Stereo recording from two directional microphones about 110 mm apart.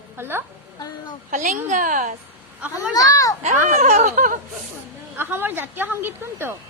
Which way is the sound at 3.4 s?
90° right.